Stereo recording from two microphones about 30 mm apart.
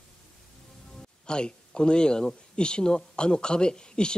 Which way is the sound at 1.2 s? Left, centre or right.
Left.